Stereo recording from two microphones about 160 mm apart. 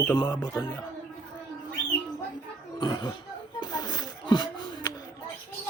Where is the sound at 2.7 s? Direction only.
30° left (ahead or behind).